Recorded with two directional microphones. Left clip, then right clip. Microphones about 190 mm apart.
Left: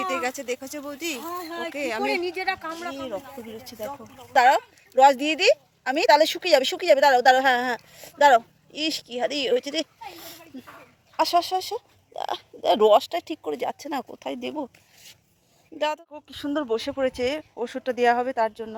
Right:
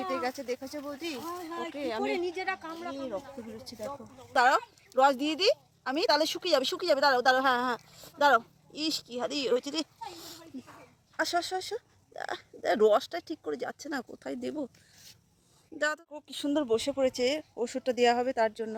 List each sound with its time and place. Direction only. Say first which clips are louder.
0.0 s speech: left 6 dB; 20° left (ahead or behind)
1.2 s speech: left 5 dB; 40° left (ahead or behind)
1.7 s speech: left 6 dB; 20° left (ahead or behind)
3.2 s speech: left 4 dB; 30° left (ahead or behind)
4.0 s speech: left 7 dB; centre (ahead or behind)
10.2 s a sound: left 3 dB; 5° right (ahead or behind)
11.3 s speech: left 8 dB; centre (ahead or behind)
16.1 s speech: left 2 dB; 15° right (ahead or behind)